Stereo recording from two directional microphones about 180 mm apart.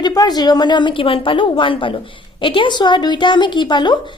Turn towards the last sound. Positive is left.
turn(degrees=25)  # may be behind; listen again after turning